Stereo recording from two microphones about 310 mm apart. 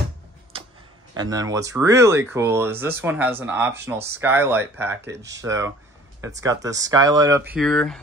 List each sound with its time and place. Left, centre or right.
1.1 s speech: centre